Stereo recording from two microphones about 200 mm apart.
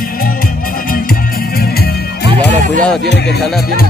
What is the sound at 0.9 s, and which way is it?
Music, 50° left (ahead or behind).